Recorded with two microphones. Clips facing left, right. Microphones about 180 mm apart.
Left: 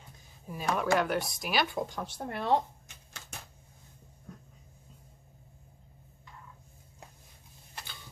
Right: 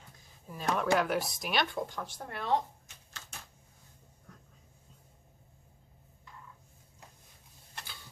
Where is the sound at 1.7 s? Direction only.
15° left (ahead or behind).